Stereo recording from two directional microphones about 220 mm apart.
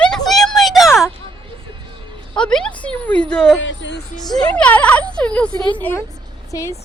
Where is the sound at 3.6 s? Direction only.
55° left (ahead or behind).